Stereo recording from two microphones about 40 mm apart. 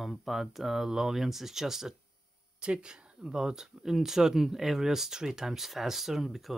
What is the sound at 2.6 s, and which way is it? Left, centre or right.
Speech, right.